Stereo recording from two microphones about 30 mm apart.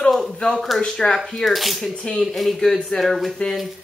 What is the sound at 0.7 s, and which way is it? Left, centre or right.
Speech, left.